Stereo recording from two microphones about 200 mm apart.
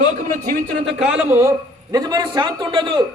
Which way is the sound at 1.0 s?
5° right (ahead or behind).